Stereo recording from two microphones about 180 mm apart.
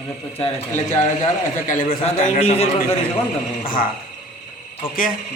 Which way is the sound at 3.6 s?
50° left (ahead or behind).